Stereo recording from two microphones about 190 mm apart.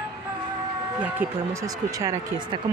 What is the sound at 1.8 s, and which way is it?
Speech, 15° right (ahead or behind).